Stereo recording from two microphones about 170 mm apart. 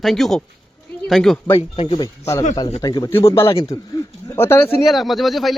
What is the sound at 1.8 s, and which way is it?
A man's voice, 30° left (ahead or behind).